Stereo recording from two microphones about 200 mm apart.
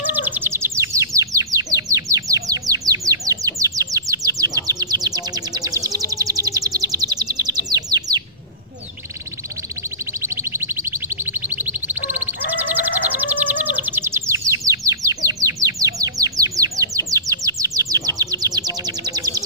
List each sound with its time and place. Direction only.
0.0 s bird: 10° right (ahead or behind)
10.2 s a sound: 10° right (ahead or behind)
14.9 s bird: 15° right (ahead or behind)